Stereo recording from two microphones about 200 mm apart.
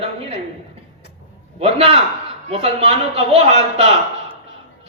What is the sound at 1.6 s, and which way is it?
A man's voice, 30° right (ahead or behind).